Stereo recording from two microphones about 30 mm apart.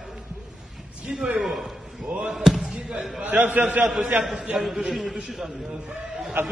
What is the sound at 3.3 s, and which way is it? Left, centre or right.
Speech, right.